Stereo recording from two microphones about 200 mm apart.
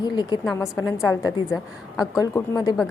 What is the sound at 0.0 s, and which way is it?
A woman's voice, 20° left (ahead or behind).